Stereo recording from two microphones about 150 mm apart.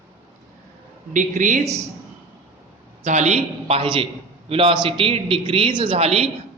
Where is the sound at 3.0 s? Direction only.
50° right (ahead or behind).